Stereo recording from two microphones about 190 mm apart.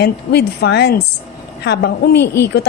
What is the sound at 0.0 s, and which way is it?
A woman's voice, 60° left (ahead or behind).